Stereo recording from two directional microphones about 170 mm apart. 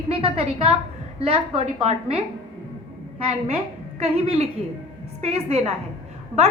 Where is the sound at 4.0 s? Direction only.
35° right (ahead or behind).